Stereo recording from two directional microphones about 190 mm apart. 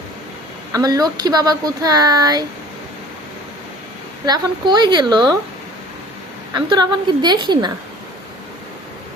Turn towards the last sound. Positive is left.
turn(degrees=-25)  # may be behind; listen again after turning